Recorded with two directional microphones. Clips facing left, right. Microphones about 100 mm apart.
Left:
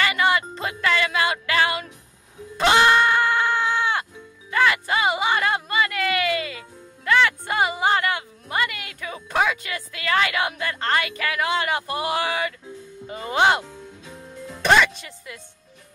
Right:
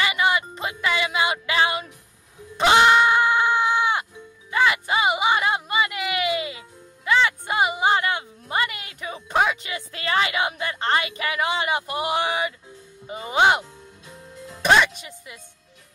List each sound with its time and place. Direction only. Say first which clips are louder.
0.0 s music: left 1 dB; 15° right (ahead or behind)
2.5 s goat: right 1 dB; 15° right (ahead or behind)
4.5 s music: even; 20° right (ahead or behind)
13.0 s speech: even; 20° right (ahead or behind)